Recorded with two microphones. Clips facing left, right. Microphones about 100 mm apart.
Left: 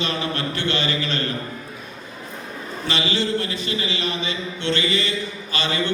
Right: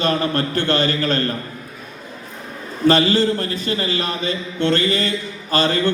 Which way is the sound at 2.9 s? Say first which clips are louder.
Right 8 dB; 45° right (ahead or behind).